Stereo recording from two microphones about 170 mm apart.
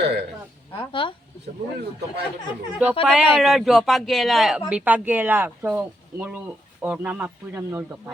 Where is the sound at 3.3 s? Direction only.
Centre (ahead or behind).